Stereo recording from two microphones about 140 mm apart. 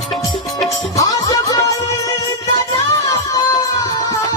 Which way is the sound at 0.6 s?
25° left (ahead or behind).